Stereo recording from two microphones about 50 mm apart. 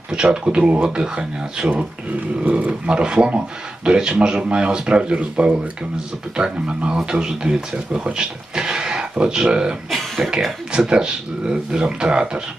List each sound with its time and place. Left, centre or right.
0.1 s speech: centre
2.4 s speech: right
9.9 s speech: centre